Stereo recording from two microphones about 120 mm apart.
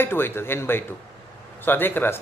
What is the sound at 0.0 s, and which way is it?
Speech, 20° left (ahead or behind).